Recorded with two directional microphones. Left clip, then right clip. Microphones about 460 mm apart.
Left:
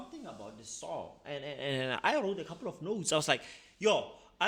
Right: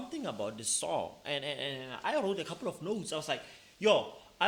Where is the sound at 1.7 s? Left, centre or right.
Left.